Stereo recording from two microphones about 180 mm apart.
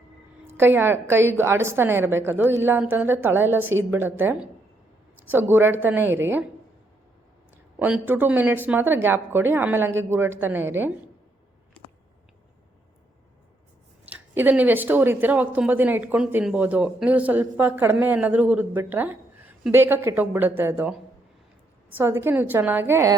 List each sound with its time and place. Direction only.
0.5 s a woman's voice: 10° right (ahead or behind)
7.5 s speech: 10° right (ahead or behind)
14.1 s speech: 10° right (ahead or behind)
21.9 s speech: 15° right (ahead or behind)